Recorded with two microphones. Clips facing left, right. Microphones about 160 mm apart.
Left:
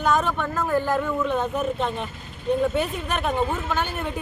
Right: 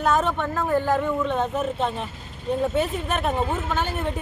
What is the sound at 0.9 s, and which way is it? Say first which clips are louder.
Speech: right 1 dB; 25° right (ahead or behind).